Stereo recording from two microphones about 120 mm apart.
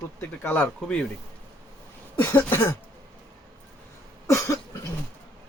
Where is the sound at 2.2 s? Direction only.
15° left (ahead or behind).